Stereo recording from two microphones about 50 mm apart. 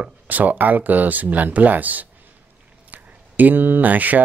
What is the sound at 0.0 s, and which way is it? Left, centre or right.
Speech, right.